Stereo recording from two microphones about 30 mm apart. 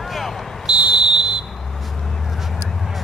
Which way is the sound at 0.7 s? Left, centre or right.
Right.